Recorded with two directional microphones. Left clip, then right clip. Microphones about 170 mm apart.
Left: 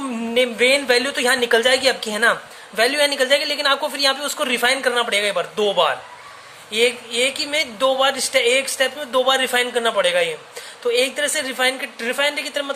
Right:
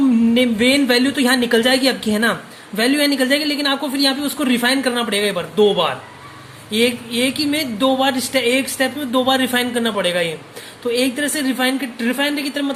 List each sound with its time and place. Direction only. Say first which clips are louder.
0.3 s a woman's voice: left 3 dB; 20° left (ahead or behind)